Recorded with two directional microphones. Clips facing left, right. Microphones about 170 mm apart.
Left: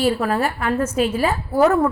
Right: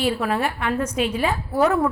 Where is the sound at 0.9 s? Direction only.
45° left (ahead or behind).